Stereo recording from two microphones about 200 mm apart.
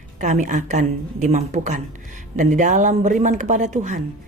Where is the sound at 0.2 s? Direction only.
40° right (ahead or behind).